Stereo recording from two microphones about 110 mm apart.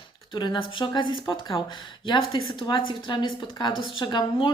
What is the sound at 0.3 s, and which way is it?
Speech, 45° left (ahead or behind).